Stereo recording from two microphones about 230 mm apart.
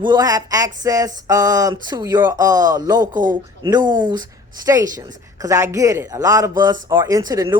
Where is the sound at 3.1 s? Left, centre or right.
Right.